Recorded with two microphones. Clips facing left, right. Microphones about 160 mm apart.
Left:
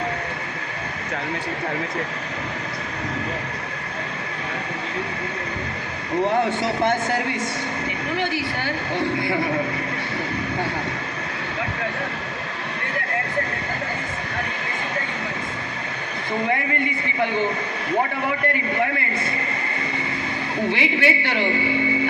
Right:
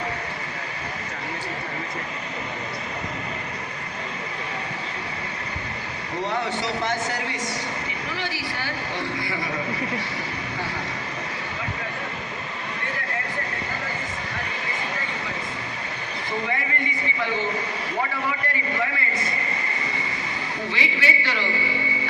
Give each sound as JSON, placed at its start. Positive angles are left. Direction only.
{"t": 6.2, "sound": "a man's voice", "side_deg": 55}
{"t": 20.7, "sound": "a man's voice", "side_deg": 60}